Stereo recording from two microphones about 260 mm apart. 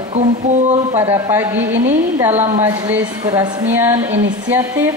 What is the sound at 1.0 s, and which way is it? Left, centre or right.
Speech, centre.